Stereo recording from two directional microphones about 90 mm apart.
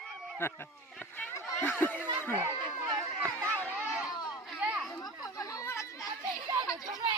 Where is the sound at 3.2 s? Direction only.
15° left (ahead or behind).